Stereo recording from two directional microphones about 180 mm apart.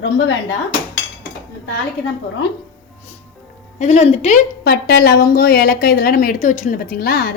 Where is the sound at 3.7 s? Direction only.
40° left (ahead or behind).